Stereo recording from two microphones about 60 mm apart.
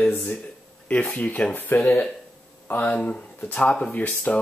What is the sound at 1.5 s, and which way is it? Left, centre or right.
Speech, left.